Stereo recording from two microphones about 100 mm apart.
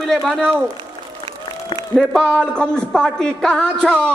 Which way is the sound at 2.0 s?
10° left (ahead or behind).